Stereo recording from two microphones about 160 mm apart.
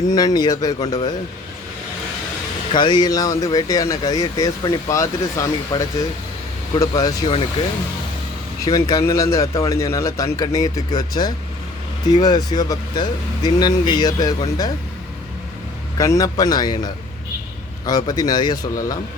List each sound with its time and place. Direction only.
0.1 s speech: 25° left (ahead or behind)
2.7 s speech: 30° left (ahead or behind)
8.6 s speech: 20° left (ahead or behind)
16.0 s speech: 20° left (ahead or behind)